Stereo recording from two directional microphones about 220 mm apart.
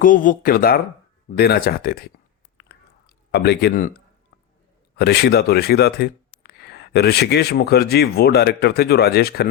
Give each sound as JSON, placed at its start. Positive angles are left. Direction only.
{"t": 0.0, "sound": "speech", "side_deg": 40}
{"t": 2.6, "sound": "whispering", "side_deg": 50}
{"t": 4.9, "sound": "speech", "side_deg": 50}